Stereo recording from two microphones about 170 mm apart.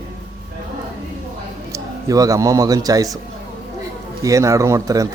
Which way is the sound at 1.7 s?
20° right (ahead or behind).